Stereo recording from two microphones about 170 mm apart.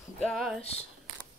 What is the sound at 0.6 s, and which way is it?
Speech, 35° left (ahead or behind).